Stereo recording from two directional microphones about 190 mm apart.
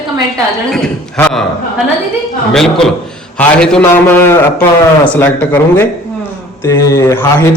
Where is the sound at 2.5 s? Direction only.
Centre (ahead or behind).